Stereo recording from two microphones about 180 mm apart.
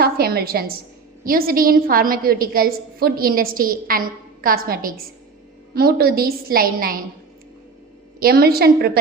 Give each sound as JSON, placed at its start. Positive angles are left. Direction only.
{"t": 0.0, "sound": "a woman's voice", "side_deg": -60}
{"t": 8.2, "sound": "a woman's voice", "side_deg": -55}